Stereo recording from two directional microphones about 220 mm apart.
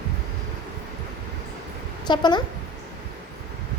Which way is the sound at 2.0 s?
20° left (ahead or behind).